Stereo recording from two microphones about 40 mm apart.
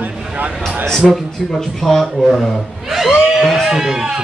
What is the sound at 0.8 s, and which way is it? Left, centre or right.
Speech, centre.